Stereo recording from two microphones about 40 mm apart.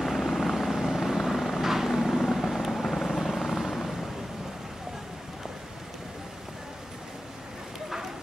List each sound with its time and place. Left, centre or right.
0.0 s vehicle: centre